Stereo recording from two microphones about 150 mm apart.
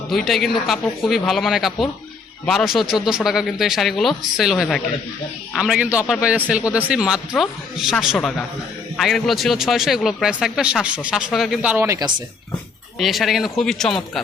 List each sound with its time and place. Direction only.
0.1 s a man's voice: centre (ahead or behind)
11.9 s speech: 25° right (ahead or behind)
13.0 s a man's voice: centre (ahead or behind)